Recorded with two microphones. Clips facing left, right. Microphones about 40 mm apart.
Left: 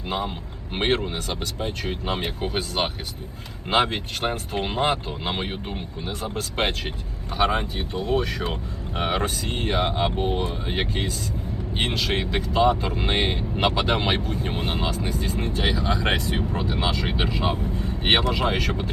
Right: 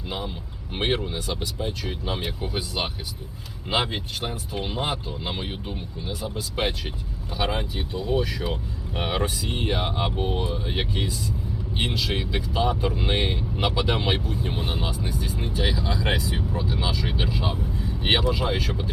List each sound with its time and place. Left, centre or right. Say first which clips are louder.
0.9 s speech: left 2 dB; left
10.5 s speech: left 1 dB; left
11.8 s speech: left 2 dB; left
15.7 s speech: left 2 dB; left